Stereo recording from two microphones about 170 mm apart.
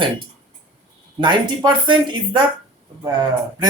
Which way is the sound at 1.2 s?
25° right (ahead or behind).